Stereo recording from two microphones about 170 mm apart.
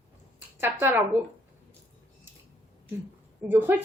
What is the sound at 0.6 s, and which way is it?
Speech, 15° right (ahead or behind).